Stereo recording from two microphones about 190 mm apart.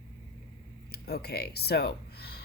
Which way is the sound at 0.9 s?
55° left (ahead or behind).